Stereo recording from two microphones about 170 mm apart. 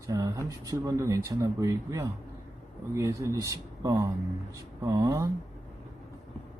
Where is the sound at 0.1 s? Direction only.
20° right (ahead or behind).